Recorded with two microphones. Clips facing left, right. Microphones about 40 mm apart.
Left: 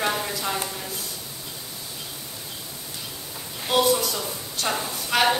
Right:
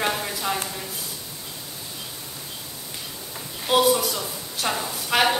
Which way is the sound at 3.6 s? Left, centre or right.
Centre.